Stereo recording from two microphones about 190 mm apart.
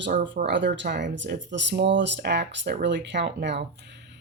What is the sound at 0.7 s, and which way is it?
Speech, 65° right (ahead or behind).